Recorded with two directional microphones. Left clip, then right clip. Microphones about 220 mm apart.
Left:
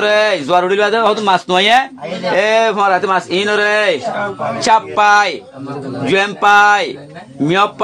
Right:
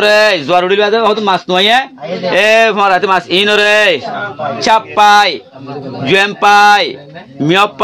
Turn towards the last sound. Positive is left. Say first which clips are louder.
# right 3 dB
turn(degrees=-35)  # may be behind; listen again after turning